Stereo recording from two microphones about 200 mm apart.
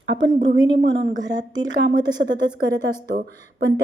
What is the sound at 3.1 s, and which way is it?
Speech, 55° right (ahead or behind).